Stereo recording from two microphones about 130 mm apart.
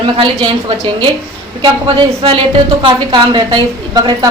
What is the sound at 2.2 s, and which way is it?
A woman's voice, 40° right (ahead or behind).